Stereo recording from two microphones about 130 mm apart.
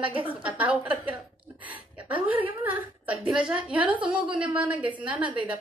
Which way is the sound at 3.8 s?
40° right (ahead or behind).